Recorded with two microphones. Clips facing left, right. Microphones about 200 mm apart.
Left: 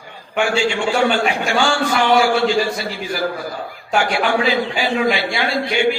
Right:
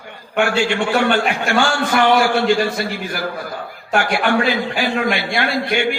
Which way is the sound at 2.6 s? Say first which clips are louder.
Even; 60° right (ahead or behind).